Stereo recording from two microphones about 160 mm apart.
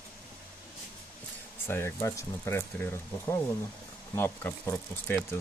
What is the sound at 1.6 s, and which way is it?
Speech, 15° left (ahead or behind).